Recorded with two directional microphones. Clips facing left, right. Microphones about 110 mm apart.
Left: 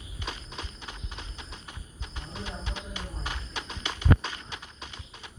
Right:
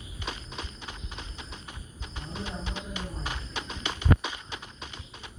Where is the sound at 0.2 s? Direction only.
15° right (ahead or behind).